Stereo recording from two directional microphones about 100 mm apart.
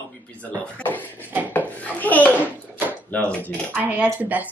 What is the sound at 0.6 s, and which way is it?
Speech, 15° left (ahead or behind).